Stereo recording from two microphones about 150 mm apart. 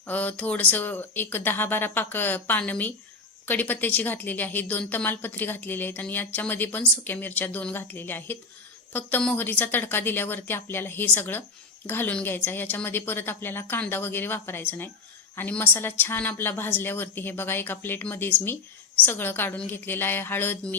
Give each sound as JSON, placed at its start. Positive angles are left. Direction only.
{"t": 0.1, "sound": "a woman's voice", "side_deg": 10}